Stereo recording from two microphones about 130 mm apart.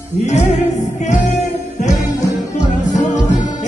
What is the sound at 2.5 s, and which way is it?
Music, 65° left (ahead or behind).